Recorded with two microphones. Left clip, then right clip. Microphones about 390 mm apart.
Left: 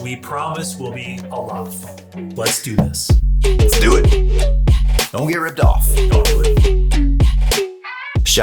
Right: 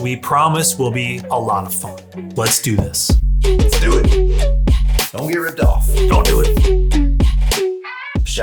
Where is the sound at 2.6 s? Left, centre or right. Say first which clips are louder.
Right 1 dB; right.